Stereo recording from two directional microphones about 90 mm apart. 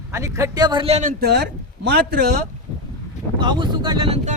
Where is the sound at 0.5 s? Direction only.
55° right (ahead or behind).